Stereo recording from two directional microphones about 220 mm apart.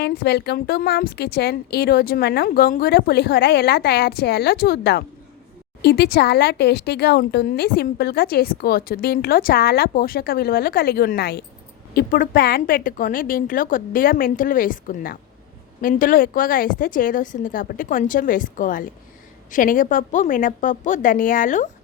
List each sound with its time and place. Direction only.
0.0 s a woman's voice: 50° left (ahead or behind)